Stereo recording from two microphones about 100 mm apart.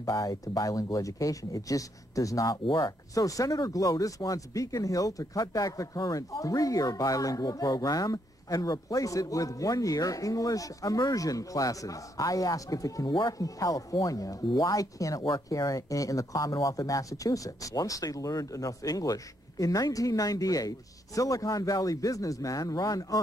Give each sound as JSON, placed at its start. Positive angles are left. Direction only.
{"t": 0.0, "sound": "speech", "side_deg": 35}
{"t": 2.6, "sound": "speech", "side_deg": 55}
{"t": 3.2, "sound": "speech", "side_deg": 35}